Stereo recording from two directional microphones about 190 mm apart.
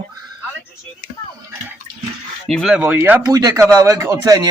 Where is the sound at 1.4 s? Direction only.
15° right (ahead or behind).